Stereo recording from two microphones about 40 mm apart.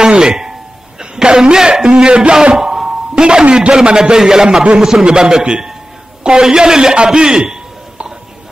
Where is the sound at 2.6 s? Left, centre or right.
Centre.